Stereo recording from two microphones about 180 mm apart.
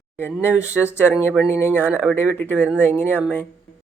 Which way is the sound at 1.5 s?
15° left (ahead or behind).